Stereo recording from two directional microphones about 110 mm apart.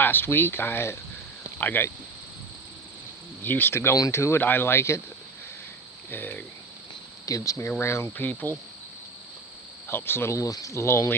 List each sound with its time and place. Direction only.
0.0 s speech: 20° left (ahead or behind)
3.4 s speech: 20° left (ahead or behind)
6.1 s speech: 15° left (ahead or behind)
7.3 s speech: 30° left (ahead or behind)
9.9 s speech: 20° left (ahead or behind)